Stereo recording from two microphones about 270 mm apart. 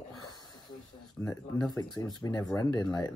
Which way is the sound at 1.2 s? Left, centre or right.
Centre.